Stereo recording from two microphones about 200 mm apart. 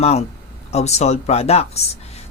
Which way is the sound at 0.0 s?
35° left (ahead or behind).